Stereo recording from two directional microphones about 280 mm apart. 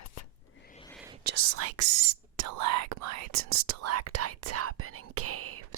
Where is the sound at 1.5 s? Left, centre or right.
Right.